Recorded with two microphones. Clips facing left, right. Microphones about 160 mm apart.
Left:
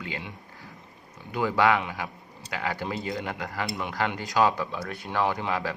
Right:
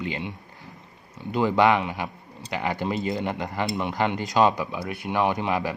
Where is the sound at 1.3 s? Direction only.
20° right (ahead or behind).